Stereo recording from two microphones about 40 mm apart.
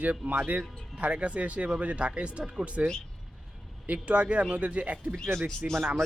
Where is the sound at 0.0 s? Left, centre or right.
Right.